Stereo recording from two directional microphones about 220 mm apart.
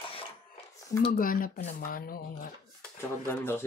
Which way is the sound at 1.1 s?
40° left (ahead or behind).